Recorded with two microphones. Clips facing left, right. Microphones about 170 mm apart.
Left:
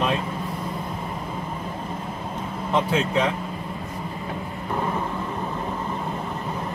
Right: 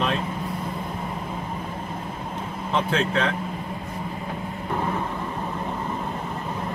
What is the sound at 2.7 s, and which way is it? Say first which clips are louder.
Speech: left 1 dB; 10° left (ahead or behind).